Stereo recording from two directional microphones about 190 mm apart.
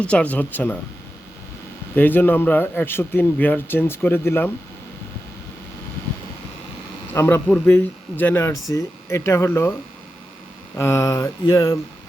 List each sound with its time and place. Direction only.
0.0 s speech: 5° left (ahead or behind)
2.0 s speech: 10° left (ahead or behind)
7.1 s speech: 15° left (ahead or behind)
10.8 s speech: 15° left (ahead or behind)